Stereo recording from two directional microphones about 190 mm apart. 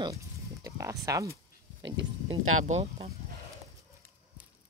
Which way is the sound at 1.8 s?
70° right (ahead or behind).